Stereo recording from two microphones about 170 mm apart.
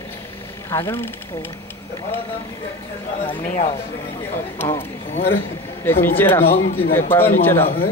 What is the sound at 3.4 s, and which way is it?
Speech, 40° left (ahead or behind).